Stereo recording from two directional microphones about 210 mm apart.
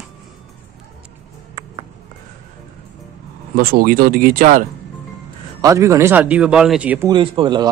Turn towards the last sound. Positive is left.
turn(degrees=-20)  # may be behind; listen again after turning